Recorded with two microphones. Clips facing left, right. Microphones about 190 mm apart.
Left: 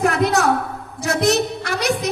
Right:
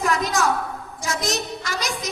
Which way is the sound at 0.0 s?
65° left (ahead or behind).